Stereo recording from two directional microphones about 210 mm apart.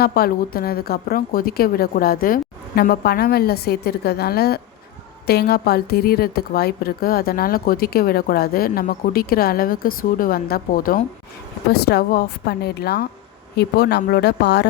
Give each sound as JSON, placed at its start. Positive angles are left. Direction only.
{"t": 0.0, "sound": "a woman's voice", "side_deg": 45}